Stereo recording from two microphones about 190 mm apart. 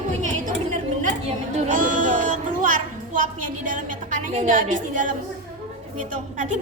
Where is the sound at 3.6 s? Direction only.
45° right (ahead or behind).